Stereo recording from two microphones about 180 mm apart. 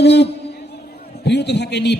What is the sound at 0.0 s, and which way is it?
A man's voice, 70° left (ahead or behind).